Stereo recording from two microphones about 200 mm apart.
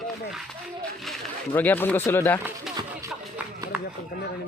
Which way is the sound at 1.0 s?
10° left (ahead or behind).